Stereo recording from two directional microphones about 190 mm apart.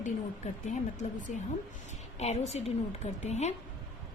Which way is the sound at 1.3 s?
40° left (ahead or behind).